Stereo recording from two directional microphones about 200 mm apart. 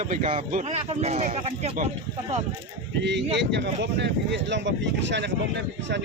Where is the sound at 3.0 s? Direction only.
60° right (ahead or behind).